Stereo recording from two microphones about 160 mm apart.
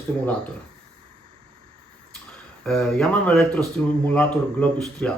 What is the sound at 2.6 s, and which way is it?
Speech, 5° left (ahead or behind).